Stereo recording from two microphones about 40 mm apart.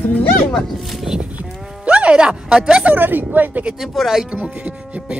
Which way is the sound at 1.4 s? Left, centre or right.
Right.